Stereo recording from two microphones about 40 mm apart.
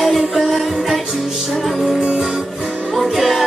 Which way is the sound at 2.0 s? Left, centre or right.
Centre.